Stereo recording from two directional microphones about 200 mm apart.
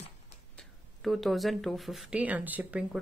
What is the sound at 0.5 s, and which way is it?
Speech, centre (ahead or behind).